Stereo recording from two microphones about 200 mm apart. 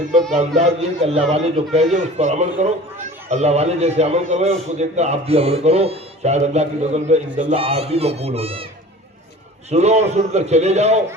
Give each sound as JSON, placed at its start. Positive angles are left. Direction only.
{"t": 0.3, "sound": "a man's voice", "side_deg": -35}
{"t": 9.6, "sound": "a man's voice", "side_deg": -35}